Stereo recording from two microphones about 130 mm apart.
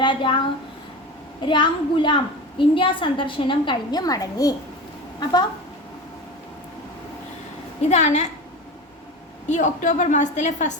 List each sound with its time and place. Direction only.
0.0 s a woman's voice: 40° left (ahead or behind)
1.4 s a woman's voice: 35° left (ahead or behind)
7.8 s a woman's voice: 60° left (ahead or behind)
9.5 s a woman's voice: 70° left (ahead or behind)